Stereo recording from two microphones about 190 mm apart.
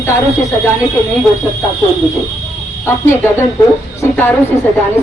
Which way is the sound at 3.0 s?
15° left (ahead or behind).